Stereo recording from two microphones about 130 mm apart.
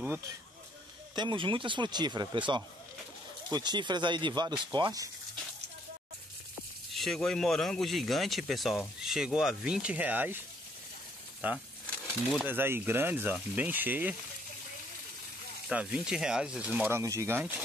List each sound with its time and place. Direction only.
1.1 s speech: 40° right (ahead or behind)
6.9 s speech: centre (ahead or behind)
11.4 s speech: 15° right (ahead or behind)
11.8 s a sound: 5° left (ahead or behind)
12.4 s speech: 15° right (ahead or behind)
15.7 s speech: 10° right (ahead or behind)
17.0 s speech: 25° right (ahead or behind)